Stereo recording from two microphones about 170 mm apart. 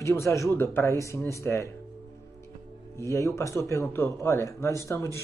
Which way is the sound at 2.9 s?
15° left (ahead or behind).